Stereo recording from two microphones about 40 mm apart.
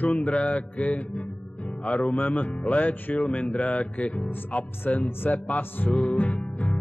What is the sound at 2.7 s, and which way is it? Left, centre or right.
Music, left.